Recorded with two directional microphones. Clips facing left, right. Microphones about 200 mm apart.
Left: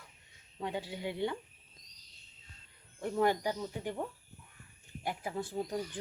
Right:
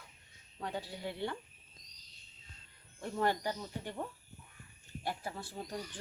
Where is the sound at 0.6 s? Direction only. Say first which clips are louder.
Left 3 dB; 20° left (ahead or behind).